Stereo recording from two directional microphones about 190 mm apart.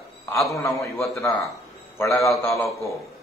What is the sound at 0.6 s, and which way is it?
Speech, 15° left (ahead or behind).